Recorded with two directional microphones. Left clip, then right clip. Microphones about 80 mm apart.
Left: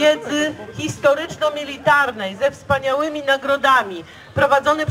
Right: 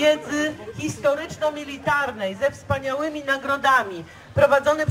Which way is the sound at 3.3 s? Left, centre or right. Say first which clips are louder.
Left 4 dB; centre.